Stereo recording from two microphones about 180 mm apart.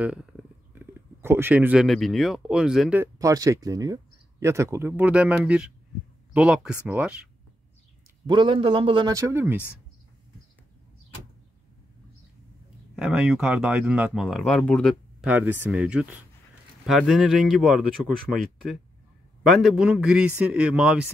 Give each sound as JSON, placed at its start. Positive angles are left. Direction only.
{"t": 0.0, "sound": "speech", "side_deg": -5}
{"t": 3.2, "sound": "speech", "side_deg": -20}
{"t": 8.3, "sound": "a man's voice", "side_deg": -25}
{"t": 12.9, "sound": "speech", "side_deg": -5}
{"t": 15.2, "sound": "speech", "side_deg": -10}